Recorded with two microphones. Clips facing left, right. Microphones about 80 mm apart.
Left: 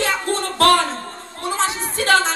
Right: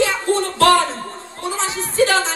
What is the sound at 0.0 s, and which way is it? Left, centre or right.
Music, left.